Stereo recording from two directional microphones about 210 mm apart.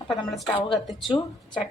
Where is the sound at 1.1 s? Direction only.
20° left (ahead or behind).